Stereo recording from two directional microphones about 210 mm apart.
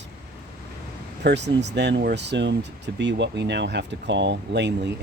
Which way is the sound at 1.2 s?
55° right (ahead or behind).